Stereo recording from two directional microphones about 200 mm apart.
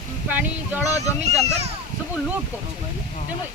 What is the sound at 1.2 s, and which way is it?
Speech, 30° right (ahead or behind).